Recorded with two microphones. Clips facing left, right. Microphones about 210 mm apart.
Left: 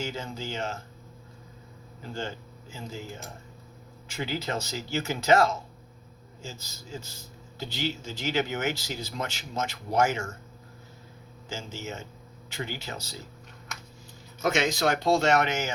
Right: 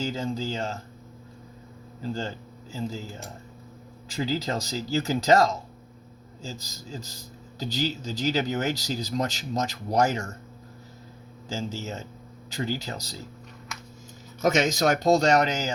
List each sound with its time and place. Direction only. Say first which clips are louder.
0.0 s speech: right 5 dB; 35° right (ahead or behind)
4.1 s speech: right 4 dB; 35° right (ahead or behind)
11.4 s speech: right 5 dB; 35° right (ahead or behind)
14.4 s speech: right 3 dB; 45° right (ahead or behind)